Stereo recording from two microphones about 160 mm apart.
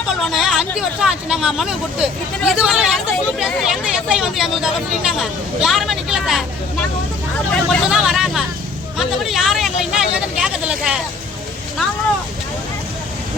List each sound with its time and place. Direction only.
0.3 s speech: centre (ahead or behind)
7.5 s speech: centre (ahead or behind)
9.0 s vehicle: centre (ahead or behind)